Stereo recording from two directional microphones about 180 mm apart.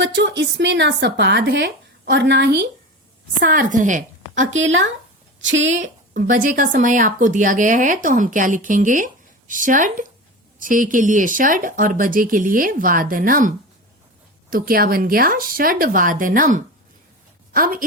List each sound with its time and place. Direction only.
0.0 s speech: 75° right (ahead or behind)
3.4 s a woman's voice: 50° right (ahead or behind)
4.5 s a woman's voice: 90° right
6.1 s speech: 50° right (ahead or behind)
14.5 s a woman's voice: 55° right (ahead or behind)